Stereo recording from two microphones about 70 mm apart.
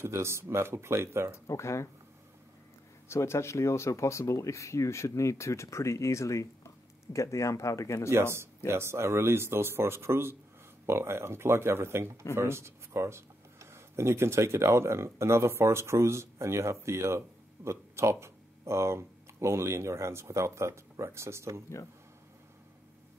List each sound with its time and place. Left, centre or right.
0.0 s speech: right
1.5 s speech: left
3.1 s speech: left
8.6 s speech: right